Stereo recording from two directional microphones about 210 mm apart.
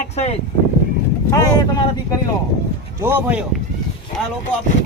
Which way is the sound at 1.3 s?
15° left (ahead or behind).